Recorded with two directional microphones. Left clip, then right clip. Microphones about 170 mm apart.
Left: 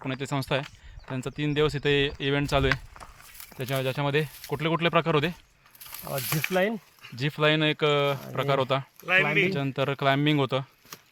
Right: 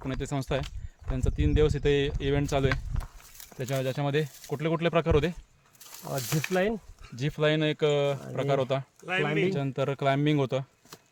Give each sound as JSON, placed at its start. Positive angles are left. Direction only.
{"t": 0.0, "sound": "speech", "side_deg": 0}
{"t": 5.8, "sound": "speech", "side_deg": -30}
{"t": 6.5, "sound": "speech", "side_deg": -65}
{"t": 7.2, "sound": "speech", "side_deg": 0}
{"t": 9.0, "sound": "speech", "side_deg": -45}
{"t": 9.5, "sound": "speech", "side_deg": 0}